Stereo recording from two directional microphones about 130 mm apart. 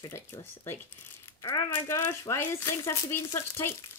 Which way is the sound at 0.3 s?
15° left (ahead or behind).